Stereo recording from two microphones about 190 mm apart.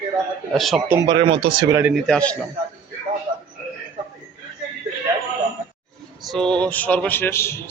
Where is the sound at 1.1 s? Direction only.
25° right (ahead or behind).